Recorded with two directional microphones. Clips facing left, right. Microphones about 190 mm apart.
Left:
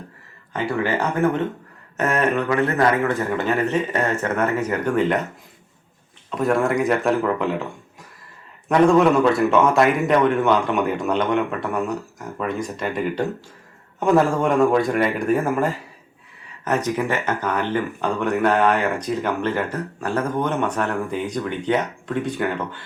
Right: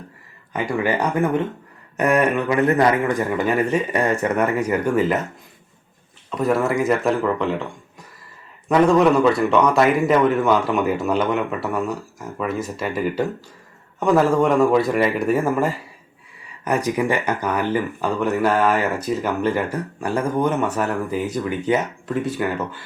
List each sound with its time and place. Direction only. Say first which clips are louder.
0.5 s speech: right 1 dB; 15° right (ahead or behind)
6.3 s a man's voice: even; centre (ahead or behind)